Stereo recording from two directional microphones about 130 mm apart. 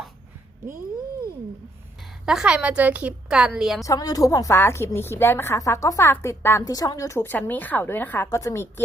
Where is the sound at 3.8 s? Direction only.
25° left (ahead or behind).